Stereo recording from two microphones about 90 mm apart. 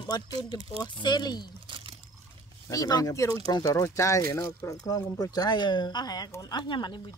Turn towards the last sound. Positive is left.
turn(degrees=60)  # may be behind; listen again after turning